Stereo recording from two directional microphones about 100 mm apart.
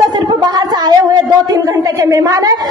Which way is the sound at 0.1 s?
45° right (ahead or behind).